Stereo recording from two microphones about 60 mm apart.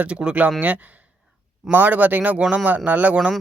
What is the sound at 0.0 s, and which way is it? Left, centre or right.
Speech, centre.